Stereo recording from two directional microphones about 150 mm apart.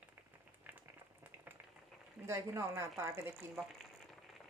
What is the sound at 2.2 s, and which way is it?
Speech, 15° right (ahead or behind).